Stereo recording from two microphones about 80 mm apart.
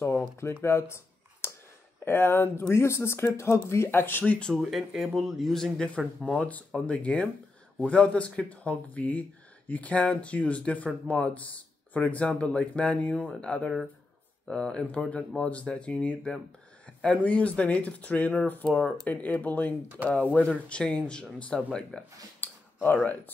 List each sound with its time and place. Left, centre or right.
0.4 s speech: left; by 4.6 s centre
4.6 s speech: centre
22.4 s a sound: left